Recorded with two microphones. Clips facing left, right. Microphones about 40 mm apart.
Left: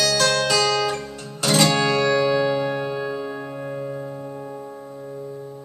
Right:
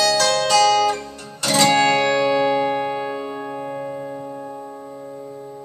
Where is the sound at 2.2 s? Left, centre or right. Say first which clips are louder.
Right 2 dB; centre.